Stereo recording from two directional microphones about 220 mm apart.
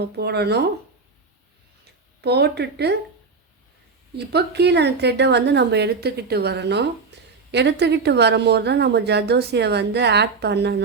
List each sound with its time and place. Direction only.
0.0 s a woman's voice: 50° right (ahead or behind)
2.2 s a woman's voice: 50° right (ahead or behind)
4.1 s a woman's voice: 50° right (ahead or behind)